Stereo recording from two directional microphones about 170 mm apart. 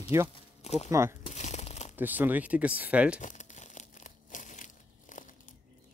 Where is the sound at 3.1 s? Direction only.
45° left (ahead or behind).